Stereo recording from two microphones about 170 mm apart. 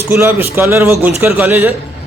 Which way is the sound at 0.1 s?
10° right (ahead or behind).